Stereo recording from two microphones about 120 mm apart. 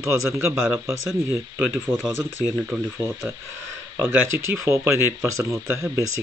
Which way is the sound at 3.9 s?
20° right (ahead or behind).